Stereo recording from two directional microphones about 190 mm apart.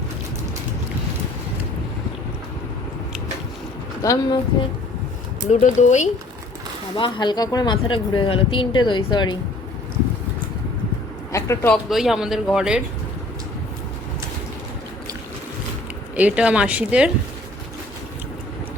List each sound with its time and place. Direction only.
4.0 s speech: 15° left (ahead or behind)
5.5 s speech: 40° left (ahead or behind)
6.9 s speech: 25° left (ahead or behind)
11.3 s speech: 15° left (ahead or behind)
11.7 s speech: centre (ahead or behind)
16.1 s speech: 5° right (ahead or behind)